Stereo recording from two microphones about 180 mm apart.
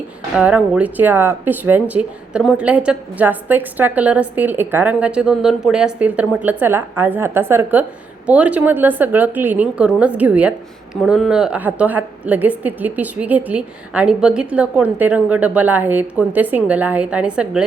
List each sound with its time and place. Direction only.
0.3 s speech: 5° right (ahead or behind)